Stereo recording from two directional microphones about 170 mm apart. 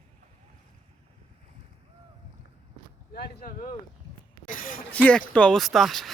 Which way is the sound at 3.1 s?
65° left (ahead or behind).